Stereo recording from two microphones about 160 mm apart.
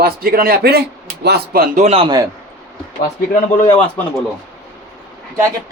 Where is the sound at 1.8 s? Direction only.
40° right (ahead or behind).